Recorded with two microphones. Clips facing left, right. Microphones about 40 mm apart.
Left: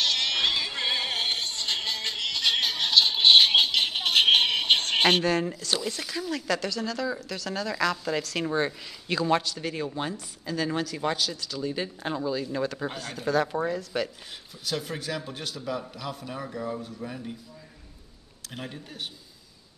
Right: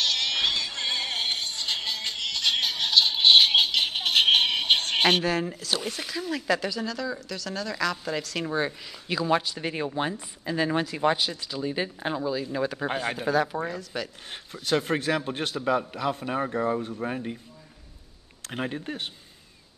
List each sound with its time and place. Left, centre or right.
0.0 s music: centre
5.9 s speech: centre
6.9 s a man's voice: centre
9.4 s speech: right
12.8 s speech: right
13.3 s a man's voice: centre
14.5 s speech: right
18.5 s speech: right